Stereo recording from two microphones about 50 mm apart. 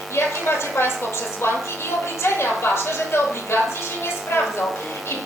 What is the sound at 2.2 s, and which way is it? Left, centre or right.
A woman's voice, left.